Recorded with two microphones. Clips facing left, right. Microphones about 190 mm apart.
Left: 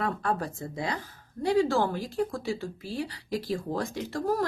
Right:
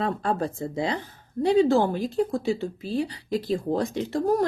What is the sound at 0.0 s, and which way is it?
Speech, 25° right (ahead or behind).